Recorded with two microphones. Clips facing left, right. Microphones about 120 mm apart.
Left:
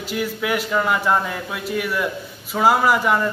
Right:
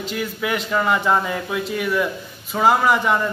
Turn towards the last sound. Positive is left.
turn(degrees=5)  # may be behind; listen again after turning